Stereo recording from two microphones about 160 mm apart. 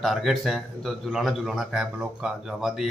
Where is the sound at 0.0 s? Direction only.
Centre (ahead or behind).